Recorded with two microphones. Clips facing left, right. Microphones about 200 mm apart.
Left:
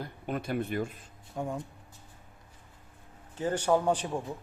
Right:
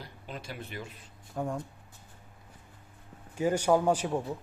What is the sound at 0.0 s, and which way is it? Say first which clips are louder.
Speech: left 8 dB; 55° left (ahead or behind).